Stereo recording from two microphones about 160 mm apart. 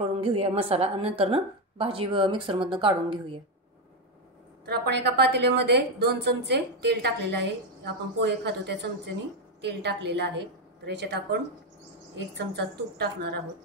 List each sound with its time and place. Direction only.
0.0 s a woman's voice: 40° right (ahead or behind)
4.6 s a woman's voice: 90° right